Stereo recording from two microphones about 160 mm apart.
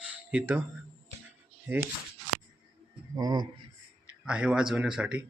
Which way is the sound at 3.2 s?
25° right (ahead or behind).